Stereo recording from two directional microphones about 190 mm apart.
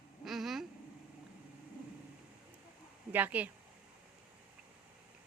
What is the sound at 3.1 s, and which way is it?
Speech, 10° right (ahead or behind).